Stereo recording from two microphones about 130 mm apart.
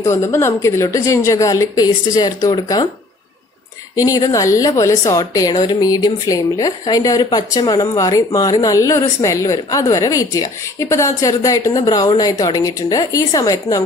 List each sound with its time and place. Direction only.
0.0 s a woman's voice: 20° left (ahead or behind)
3.9 s a woman's voice: 25° left (ahead or behind)